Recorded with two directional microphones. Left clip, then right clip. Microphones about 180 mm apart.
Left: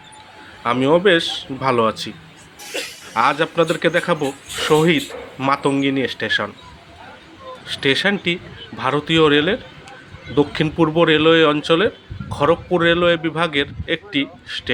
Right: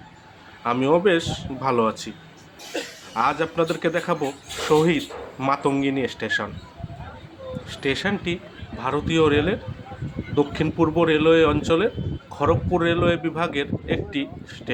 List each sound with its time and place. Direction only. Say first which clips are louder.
0.6 s a man's voice: left 4 dB; 10° left (ahead or behind)
3.1 s a man's voice: left 5 dB; 15° left (ahead or behind)
7.7 s a man's voice: left 7 dB; 15° left (ahead or behind)